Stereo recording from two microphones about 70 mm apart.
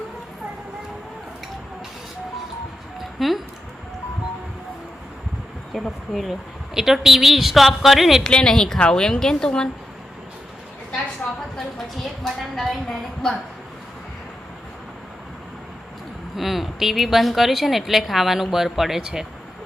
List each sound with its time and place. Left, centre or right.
3.2 s speech: centre
5.7 s a woman's voice: centre
8.2 s a woman's voice: centre
11.2 s a sound: left
12.2 s a woman's voice: centre
16.3 s a woman's voice: centre